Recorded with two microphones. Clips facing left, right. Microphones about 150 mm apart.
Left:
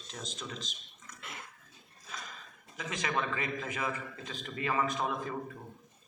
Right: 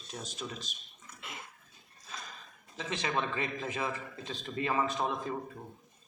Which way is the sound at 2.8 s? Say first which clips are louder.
Right 1 dB; 25° right (ahead or behind).